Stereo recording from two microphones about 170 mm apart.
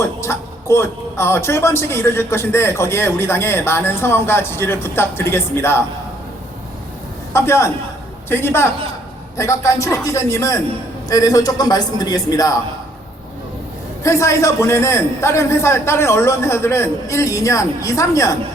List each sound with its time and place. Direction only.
0.0 s speech: 15° left (ahead or behind)
7.3 s a man's voice: 15° left (ahead or behind)
14.0 s speech: 15° left (ahead or behind)